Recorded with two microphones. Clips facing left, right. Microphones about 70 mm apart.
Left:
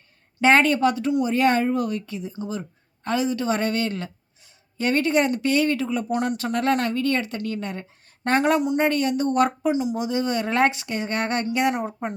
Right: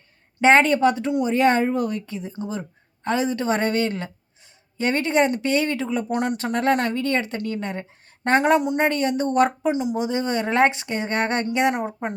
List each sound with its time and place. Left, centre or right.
0.4 s speech: right
9.7 s speech: right
10.0 s speech: right